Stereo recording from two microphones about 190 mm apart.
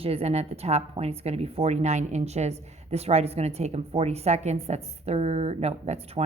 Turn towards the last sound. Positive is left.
turn(degrees=-35)  # may be behind; listen again after turning